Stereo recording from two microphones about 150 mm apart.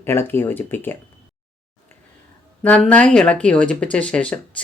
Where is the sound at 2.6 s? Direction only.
10° left (ahead or behind).